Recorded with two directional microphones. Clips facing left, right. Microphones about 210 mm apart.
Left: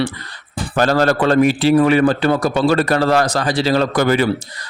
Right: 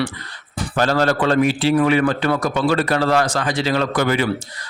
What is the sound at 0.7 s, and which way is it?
Speech, 45° left (ahead or behind).